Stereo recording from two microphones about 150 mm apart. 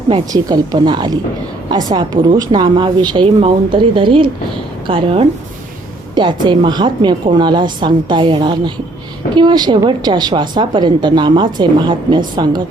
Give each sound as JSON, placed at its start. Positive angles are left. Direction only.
{"t": 0.1, "sound": "a woman's voice", "side_deg": -25}